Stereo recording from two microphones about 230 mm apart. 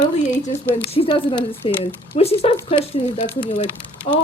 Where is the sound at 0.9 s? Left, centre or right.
Left.